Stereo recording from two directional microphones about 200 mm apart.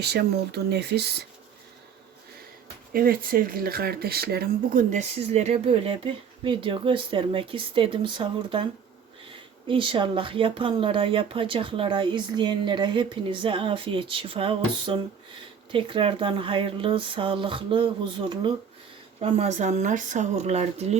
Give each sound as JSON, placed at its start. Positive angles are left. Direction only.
{"t": 0.0, "sound": "speech", "side_deg": -55}
{"t": 2.9, "sound": "speech", "side_deg": -45}
{"t": 4.9, "sound": "speech", "side_deg": -35}
{"t": 9.6, "sound": "speech", "side_deg": -25}